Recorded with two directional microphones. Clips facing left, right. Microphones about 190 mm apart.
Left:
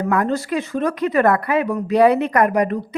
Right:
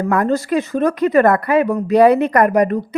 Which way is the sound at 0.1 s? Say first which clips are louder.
Right 4 dB; 45° right (ahead or behind).